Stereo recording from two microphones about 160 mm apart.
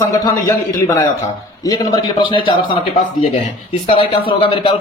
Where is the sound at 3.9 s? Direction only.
35° left (ahead or behind).